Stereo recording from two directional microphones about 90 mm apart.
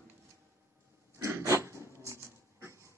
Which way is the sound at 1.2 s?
30° right (ahead or behind).